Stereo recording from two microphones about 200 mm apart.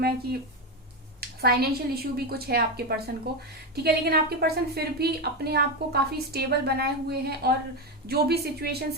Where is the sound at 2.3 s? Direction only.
50° right (ahead or behind).